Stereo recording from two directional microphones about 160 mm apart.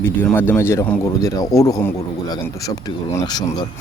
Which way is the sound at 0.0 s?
15° left (ahead or behind).